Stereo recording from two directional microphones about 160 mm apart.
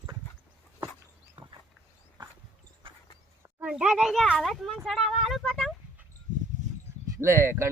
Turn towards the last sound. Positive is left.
turn(degrees=-15)  # may be behind; listen again after turning